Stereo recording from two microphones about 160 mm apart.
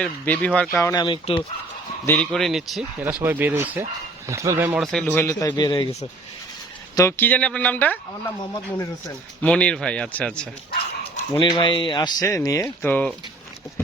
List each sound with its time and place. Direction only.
0.0 s speech: 5° left (ahead or behind)
0.8 s speech: 25° left (ahead or behind)
2.0 s speech: 5° left (ahead or behind); by 4.8 s 10° right (ahead or behind)
4.8 s speech: 5° left (ahead or behind); by 5.9 s 30° left (ahead or behind)
6.9 s speech: 15° left (ahead or behind)
8.5 s speech: 20° left (ahead or behind)
9.4 s speech: 10° left (ahead or behind)
11.3 s speech: 30° left (ahead or behind)
12.8 s speech: 10° left (ahead or behind)